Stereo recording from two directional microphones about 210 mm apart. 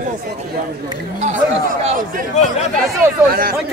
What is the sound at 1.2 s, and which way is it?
Speech, 40° right (ahead or behind).